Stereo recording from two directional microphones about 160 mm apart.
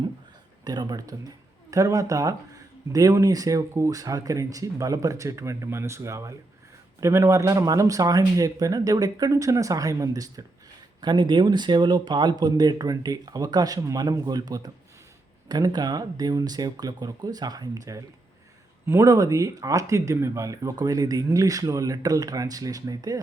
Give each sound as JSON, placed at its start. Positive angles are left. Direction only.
{"t": 0.6, "sound": "speech", "side_deg": -25}